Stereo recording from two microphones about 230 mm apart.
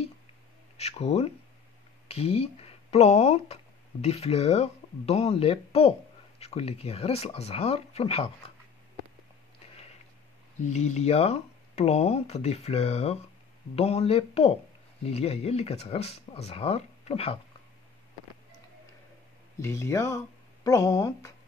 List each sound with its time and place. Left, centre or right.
0.7 s speech: left
10.6 s speech: left
19.6 s speech: centre